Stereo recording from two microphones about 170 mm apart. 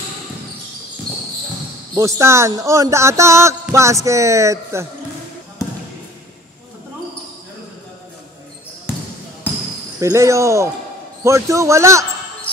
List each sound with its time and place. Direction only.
2.0 s speech: 15° right (ahead or behind)
9.9 s speech: 20° right (ahead or behind)